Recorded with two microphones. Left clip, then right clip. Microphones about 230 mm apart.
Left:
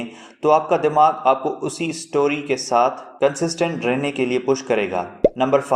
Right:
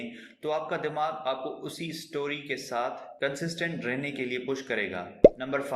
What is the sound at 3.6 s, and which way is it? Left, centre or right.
A man's voice, left.